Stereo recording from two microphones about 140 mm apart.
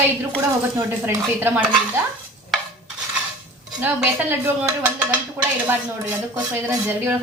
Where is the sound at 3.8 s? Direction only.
15° right (ahead or behind).